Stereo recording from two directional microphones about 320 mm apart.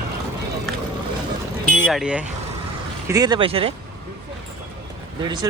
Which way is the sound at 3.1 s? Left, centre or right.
Centre.